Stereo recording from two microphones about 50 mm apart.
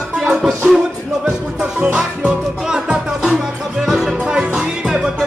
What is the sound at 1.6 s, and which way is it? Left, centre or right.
Music, centre.